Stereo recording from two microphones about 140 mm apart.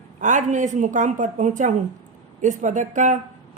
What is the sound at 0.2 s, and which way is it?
A woman's voice, 60° right (ahead or behind).